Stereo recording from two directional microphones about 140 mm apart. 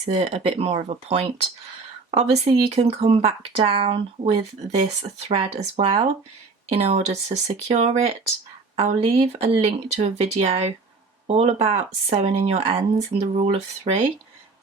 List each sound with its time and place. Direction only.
0.0 s speech: 50° right (ahead or behind)